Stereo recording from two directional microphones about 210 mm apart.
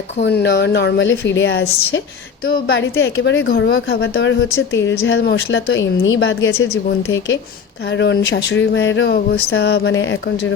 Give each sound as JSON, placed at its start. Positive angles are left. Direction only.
{"t": 0.2, "sound": "a woman's voice", "side_deg": 55}
{"t": 2.5, "sound": "a woman's voice", "side_deg": 50}
{"t": 7.9, "sound": "a woman's voice", "side_deg": 60}